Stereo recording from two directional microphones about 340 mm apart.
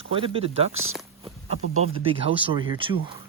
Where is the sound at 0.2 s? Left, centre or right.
Centre.